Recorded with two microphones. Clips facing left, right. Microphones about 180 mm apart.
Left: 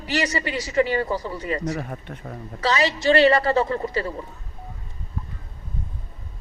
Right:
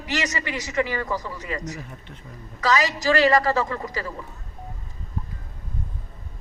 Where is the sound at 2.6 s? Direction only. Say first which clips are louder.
Even; 30° left (ahead or behind).